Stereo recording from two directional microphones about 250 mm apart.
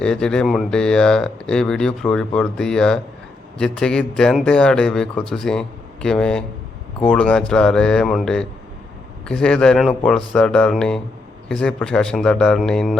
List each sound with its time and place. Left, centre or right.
0.0 s speech: centre